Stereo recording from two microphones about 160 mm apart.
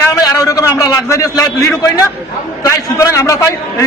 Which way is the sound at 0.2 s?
20° left (ahead or behind).